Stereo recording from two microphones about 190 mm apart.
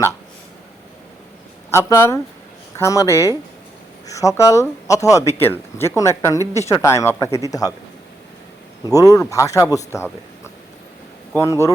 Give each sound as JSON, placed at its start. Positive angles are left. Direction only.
{"t": 1.9, "sound": "a man's voice", "side_deg": 15}
{"t": 8.9, "sound": "a man's voice", "side_deg": 15}